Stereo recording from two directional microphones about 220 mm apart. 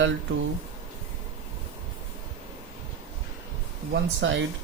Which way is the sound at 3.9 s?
60° right (ahead or behind).